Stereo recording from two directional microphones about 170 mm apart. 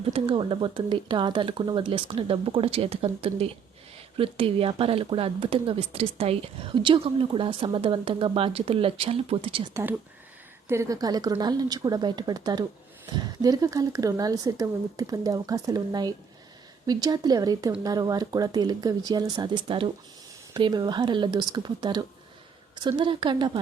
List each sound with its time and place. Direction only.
0.1 s speech: 30° right (ahead or behind)
10.7 s speech: 20° right (ahead or behind)